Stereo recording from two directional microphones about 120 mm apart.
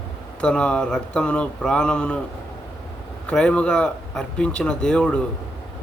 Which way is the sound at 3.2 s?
10° left (ahead or behind).